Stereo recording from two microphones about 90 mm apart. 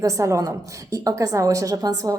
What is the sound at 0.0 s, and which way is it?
A woman's voice, 35° right (ahead or behind).